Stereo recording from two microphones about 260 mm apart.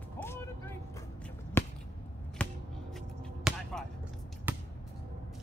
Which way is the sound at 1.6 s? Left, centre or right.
Centre.